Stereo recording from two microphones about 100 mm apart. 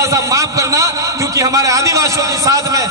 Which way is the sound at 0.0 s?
30° right (ahead or behind).